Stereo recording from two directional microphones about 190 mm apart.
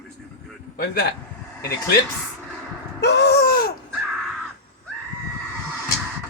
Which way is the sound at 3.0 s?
60° left (ahead or behind).